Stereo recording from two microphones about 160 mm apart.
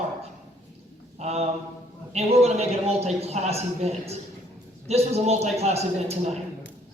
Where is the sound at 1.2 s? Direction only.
40° right (ahead or behind).